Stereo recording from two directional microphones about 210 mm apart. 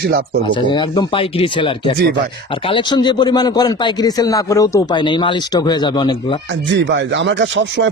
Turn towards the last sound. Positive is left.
turn(degrees=-60)  # may be behind; listen again after turning